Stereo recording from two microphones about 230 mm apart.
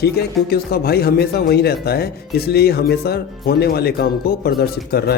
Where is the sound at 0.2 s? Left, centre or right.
Left.